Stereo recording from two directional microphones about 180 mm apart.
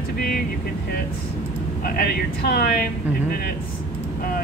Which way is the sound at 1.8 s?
60° left (ahead or behind).